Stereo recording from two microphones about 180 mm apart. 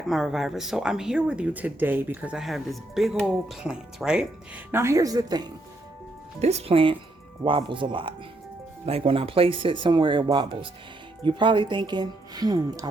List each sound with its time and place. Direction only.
0.1 s speech: centre (ahead or behind); by 5.5 s 20° right (ahead or behind)
6.4 s speech: 35° right (ahead or behind)